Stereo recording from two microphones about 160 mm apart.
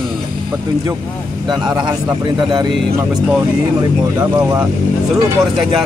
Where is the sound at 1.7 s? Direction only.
25° right (ahead or behind).